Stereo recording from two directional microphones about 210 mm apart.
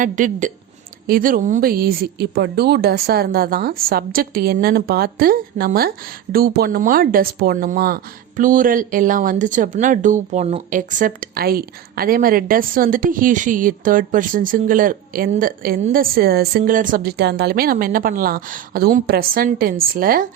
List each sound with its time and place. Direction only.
0.0 s a woman's voice: 40° right (ahead or behind)